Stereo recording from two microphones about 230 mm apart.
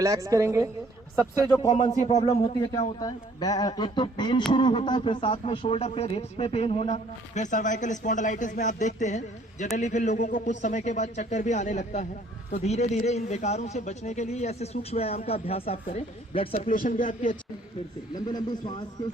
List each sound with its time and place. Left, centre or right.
0.0 s a woman's voice: centre
1.5 s a man's voice: left
16.6 s a man's voice: left
18.1 s speech: centre